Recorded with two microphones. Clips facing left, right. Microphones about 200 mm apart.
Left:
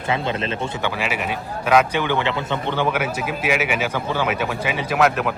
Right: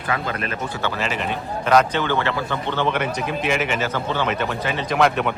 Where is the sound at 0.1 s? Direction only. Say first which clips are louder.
Left 3 dB; 25° left (ahead or behind).